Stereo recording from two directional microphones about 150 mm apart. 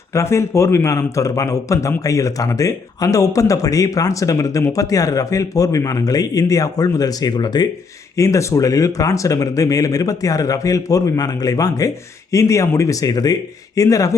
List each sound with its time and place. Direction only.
0.1 s a man's voice: 20° left (ahead or behind)